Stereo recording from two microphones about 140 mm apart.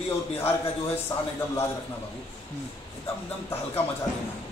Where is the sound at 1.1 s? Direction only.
25° left (ahead or behind).